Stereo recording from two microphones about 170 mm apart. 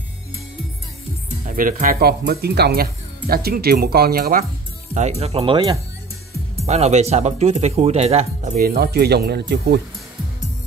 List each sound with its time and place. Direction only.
1.4 s speech: 55° right (ahead or behind)
4.9 s speech: 40° right (ahead or behind)
8.5 s speech: 65° right (ahead or behind)